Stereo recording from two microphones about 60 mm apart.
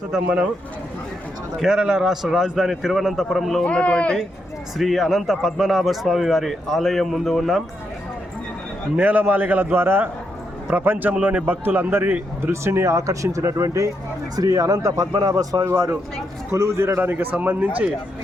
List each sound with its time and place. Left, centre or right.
1.5 s a man's voice: centre
3.6 s a man's voice: centre
4.8 s a man's voice: centre
9.0 s a man's voice: right
14.3 s speech: right
15.6 s a man's voice: right
17.0 s a man's voice: right